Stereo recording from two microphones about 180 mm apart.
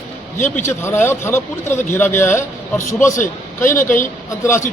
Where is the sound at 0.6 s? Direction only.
15° left (ahead or behind).